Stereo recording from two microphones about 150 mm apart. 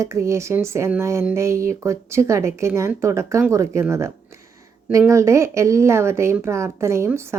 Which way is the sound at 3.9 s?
20° right (ahead or behind).